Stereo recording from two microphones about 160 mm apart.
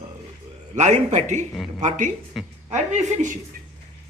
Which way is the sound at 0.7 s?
45° right (ahead or behind).